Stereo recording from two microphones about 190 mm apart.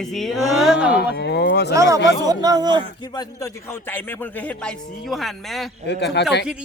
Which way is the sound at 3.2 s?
15° left (ahead or behind).